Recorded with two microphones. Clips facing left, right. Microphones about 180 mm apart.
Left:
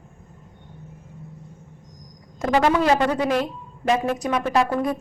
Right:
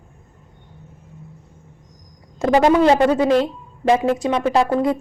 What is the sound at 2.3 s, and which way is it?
Speech, 20° right (ahead or behind).